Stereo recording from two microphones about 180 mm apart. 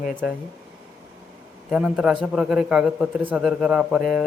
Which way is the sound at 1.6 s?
5° right (ahead or behind).